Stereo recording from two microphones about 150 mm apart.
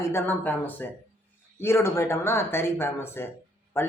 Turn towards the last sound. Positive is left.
turn(degrees=15)  # may be behind; listen again after turning